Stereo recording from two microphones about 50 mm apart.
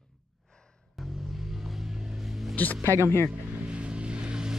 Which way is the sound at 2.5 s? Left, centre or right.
Left.